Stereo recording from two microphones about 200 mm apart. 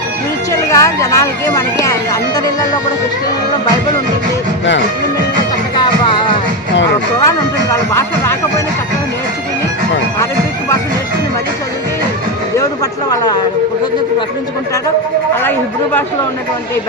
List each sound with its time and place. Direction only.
0.5 s a sound: 15° left (ahead or behind)
1.8 s speech: 15° left (ahead or behind)
7.3 s speech: 15° left (ahead or behind)